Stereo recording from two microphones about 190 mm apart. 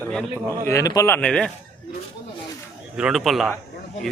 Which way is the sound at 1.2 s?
5° left (ahead or behind).